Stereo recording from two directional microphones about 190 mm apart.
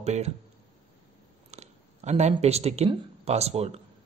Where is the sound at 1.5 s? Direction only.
35° right (ahead or behind).